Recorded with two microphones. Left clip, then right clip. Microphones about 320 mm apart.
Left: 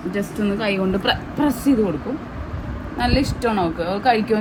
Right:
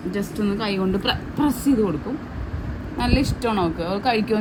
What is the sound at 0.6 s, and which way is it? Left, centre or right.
Speech, centre.